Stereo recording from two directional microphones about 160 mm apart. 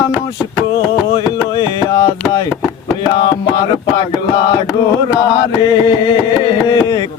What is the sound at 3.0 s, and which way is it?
Music, 25° left (ahead or behind).